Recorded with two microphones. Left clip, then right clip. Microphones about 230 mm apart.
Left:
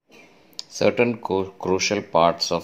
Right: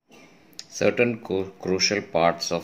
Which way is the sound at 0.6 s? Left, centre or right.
Centre.